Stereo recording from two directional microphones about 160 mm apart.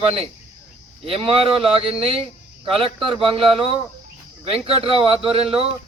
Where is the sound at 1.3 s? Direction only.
35° right (ahead or behind).